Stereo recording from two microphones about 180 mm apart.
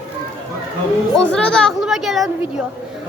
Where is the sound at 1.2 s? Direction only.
5° left (ahead or behind).